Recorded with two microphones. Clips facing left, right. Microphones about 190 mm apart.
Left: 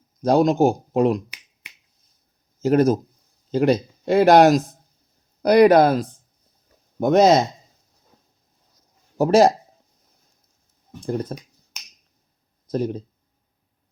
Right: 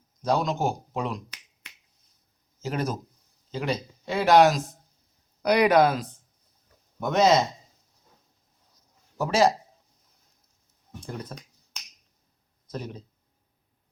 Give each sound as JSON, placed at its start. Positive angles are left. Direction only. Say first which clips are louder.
{"t": 0.2, "sound": "speech", "louder": "left 9 dB", "side_deg": 45}
{"t": 2.6, "sound": "speech", "louder": "left 13 dB", "side_deg": 40}
{"t": 5.4, "sound": "speech", "louder": "left 7 dB", "side_deg": 35}
{"t": 7.1, "sound": "speech", "louder": "left 6 dB", "side_deg": 40}
{"t": 9.2, "sound": "speech", "louder": "left 7 dB", "side_deg": 55}
{"t": 11.0, "sound": "speech", "louder": "left 11 dB", "side_deg": 45}
{"t": 12.7, "sound": "speech", "louder": "left 12 dB", "side_deg": 40}